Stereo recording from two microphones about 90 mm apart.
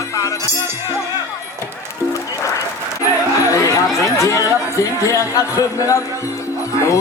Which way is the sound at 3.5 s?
35° left (ahead or behind).